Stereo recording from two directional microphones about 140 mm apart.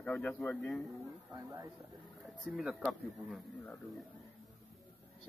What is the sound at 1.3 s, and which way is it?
Speech, 25° right (ahead or behind).